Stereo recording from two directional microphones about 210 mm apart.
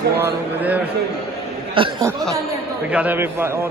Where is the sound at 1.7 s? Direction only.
25° right (ahead or behind).